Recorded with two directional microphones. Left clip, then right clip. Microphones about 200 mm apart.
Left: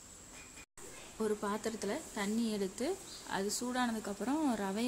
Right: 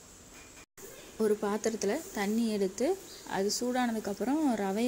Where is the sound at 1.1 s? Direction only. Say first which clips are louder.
Right 6 dB; 10° right (ahead or behind).